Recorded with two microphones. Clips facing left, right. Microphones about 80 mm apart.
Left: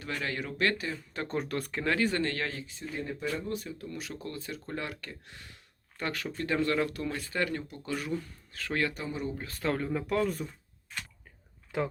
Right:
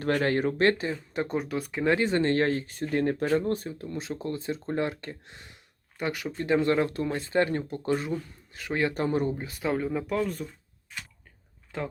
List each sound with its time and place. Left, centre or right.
0.0 s speech: right; by 1.4 s centre
1.4 s speech: centre
1.8 s speech: right
3.5 s speech: right; by 8.9 s centre
9.0 s speech: right
9.4 s speech: centre
11.7 s speech: centre